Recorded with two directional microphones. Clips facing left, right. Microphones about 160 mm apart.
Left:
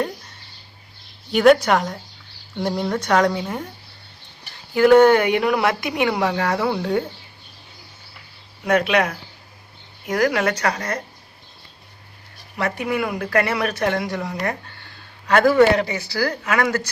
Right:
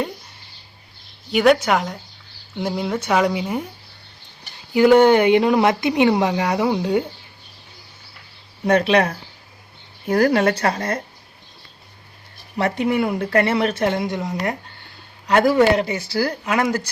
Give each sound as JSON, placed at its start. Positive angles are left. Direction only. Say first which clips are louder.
{"t": 1.3, "sound": "speech", "louder": "left 1 dB", "side_deg": 0}
{"t": 4.7, "sound": "speech", "louder": "even", "side_deg": -20}
{"t": 8.6, "sound": "speech", "louder": "right 2 dB", "side_deg": -30}
{"t": 12.5, "sound": "speech", "louder": "right 3 dB", "side_deg": -30}